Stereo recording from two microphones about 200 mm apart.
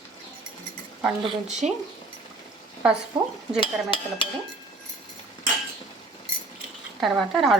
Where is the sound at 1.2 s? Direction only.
30° right (ahead or behind).